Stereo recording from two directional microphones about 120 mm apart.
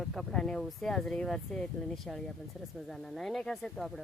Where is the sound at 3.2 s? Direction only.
5° left (ahead or behind).